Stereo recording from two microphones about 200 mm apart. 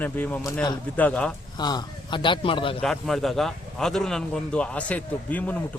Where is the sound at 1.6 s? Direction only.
20° left (ahead or behind).